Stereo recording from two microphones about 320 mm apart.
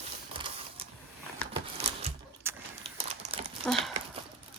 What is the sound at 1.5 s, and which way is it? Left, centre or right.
Scissors, centre.